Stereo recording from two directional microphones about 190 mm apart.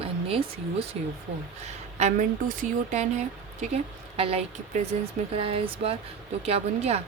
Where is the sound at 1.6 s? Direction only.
35° right (ahead or behind).